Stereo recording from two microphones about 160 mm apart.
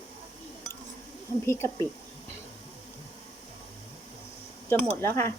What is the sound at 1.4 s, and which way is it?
Speech, 15° left (ahead or behind).